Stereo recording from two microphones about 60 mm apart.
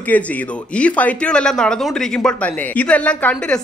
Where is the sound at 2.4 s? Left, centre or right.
Left.